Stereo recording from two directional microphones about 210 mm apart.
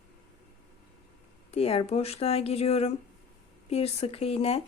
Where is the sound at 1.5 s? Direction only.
30° left (ahead or behind).